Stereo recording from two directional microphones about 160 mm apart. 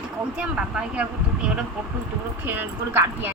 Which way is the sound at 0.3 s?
5° right (ahead or behind).